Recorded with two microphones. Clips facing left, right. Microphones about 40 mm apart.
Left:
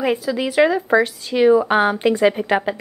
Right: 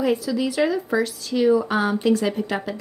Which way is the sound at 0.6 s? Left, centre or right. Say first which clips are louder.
Left 8 dB; left.